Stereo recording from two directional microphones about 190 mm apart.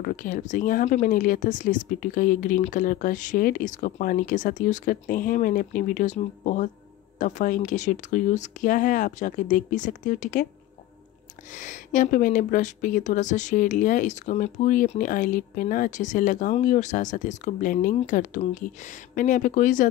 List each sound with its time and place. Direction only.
0.0 s speech: 45° left (ahead or behind)
11.5 s speech: 40° left (ahead or behind)